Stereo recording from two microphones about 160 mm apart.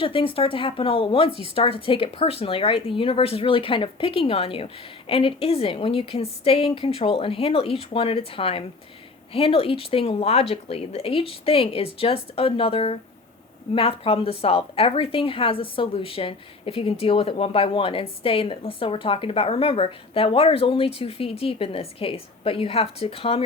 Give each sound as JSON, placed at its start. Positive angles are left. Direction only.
{"t": 0.0, "sound": "a woman's voice", "side_deg": 35}